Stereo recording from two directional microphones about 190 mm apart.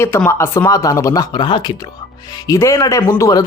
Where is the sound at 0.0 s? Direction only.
15° left (ahead or behind).